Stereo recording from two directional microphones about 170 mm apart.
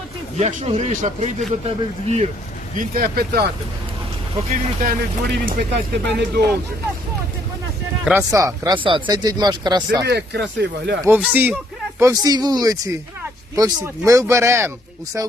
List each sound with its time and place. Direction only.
0.3 s speech: 40° right (ahead or behind)
2.7 s speech: 55° right (ahead or behind)
4.8 s speech: 55° right (ahead or behind)
5.7 s speech: 90° right
8.0 s speech: 15° right (ahead or behind)
10.1 s speech: 80° right
11.0 s speech: 10° right (ahead or behind)